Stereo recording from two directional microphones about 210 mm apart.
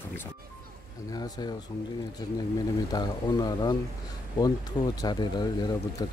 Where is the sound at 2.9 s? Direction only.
20° left (ahead or behind).